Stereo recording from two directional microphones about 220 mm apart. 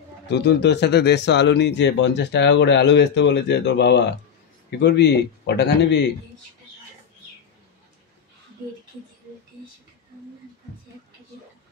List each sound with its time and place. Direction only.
0.3 s speech: 50° left (ahead or behind)